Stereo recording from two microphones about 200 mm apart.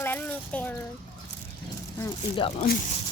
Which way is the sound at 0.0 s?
10° left (ahead or behind).